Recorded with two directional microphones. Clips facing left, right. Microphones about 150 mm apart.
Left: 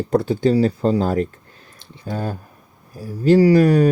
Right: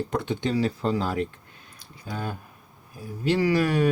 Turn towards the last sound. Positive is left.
turn(degrees=40)  # may be behind; listen again after turning